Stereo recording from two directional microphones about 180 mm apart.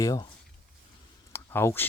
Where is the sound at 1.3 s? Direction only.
15° left (ahead or behind).